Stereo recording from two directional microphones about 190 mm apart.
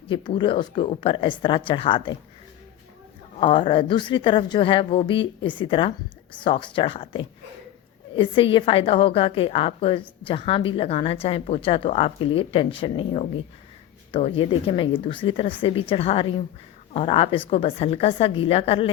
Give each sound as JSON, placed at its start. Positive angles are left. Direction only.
{"t": 0.1, "sound": "a woman's voice", "side_deg": 25}
{"t": 3.4, "sound": "a woman's voice", "side_deg": 25}